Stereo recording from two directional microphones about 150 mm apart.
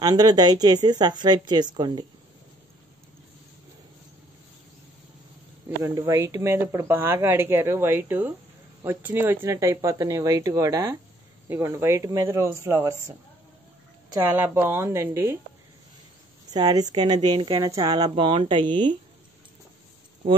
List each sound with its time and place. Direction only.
0.0 s speech: 25° right (ahead or behind)
5.9 s a woman's voice: 20° right (ahead or behind)
14.1 s a woman's voice: 15° right (ahead or behind)
16.5 s speech: 25° right (ahead or behind)